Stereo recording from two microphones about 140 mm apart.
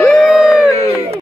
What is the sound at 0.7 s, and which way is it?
Speech, 25° left (ahead or behind).